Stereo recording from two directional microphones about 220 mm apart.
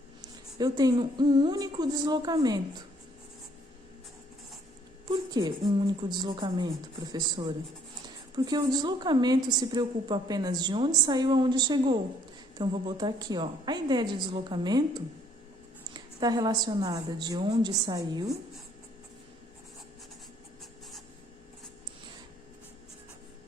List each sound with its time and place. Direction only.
0.2 s a woman's voice: 15° right (ahead or behind)
5.3 s a woman's voice: 20° right (ahead or behind)